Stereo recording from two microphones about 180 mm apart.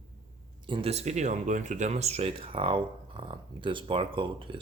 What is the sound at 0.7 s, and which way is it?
Speech, 35° right (ahead or behind).